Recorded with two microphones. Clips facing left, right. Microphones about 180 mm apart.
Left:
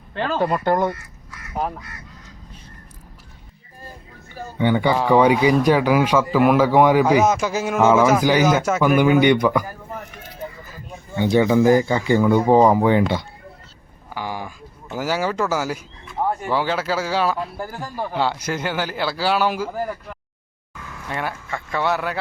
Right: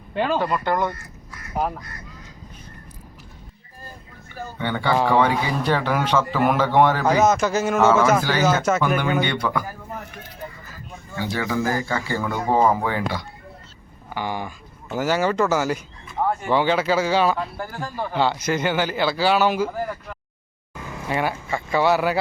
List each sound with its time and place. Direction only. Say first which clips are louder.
0.1 s speech: right 2 dB; 10° right (ahead or behind)
0.4 s speech: left 3 dB; 40° left (ahead or behind)
4.5 s speech: left 4 dB; 15° left (ahead or behind)
11.1 s speech: left 9 dB; 20° left (ahead or behind)
14.1 s a sound: right 1 dB; 5° left (ahead or behind)
14.9 s speech: right 2 dB; 5° left (ahead or behind)
20.7 s a sound: right 4 dB; 20° right (ahead or behind)
21.1 s speech: right 3 dB; 5° right (ahead or behind)